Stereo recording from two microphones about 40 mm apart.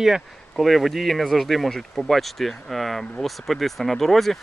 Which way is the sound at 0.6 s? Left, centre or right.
Centre.